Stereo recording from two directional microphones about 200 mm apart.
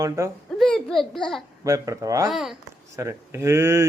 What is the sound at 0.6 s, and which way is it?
Speech, centre (ahead or behind).